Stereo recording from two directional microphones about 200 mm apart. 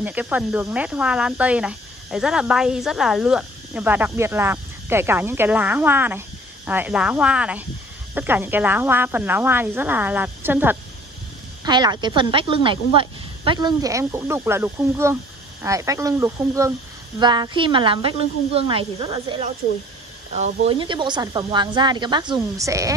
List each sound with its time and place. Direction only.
0.0 s speech: 10° right (ahead or behind)
11.6 s speech: 20° right (ahead or behind)